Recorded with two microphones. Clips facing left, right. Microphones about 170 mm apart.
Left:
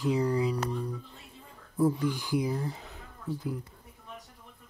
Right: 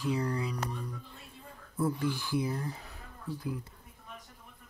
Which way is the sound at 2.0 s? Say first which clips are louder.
Left 2 dB; 15° left (ahead or behind).